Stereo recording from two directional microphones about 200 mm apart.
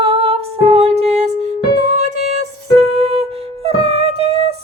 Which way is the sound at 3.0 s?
30° right (ahead or behind).